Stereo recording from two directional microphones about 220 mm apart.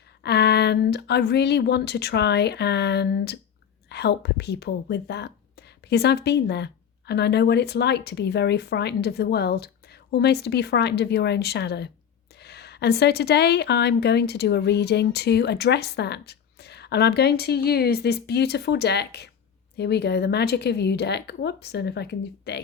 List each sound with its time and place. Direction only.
0.2 s a woman's voice: 50° left (ahead or behind)